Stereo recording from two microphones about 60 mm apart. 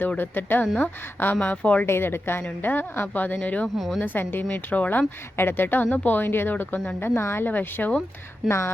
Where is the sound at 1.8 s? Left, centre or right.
Left.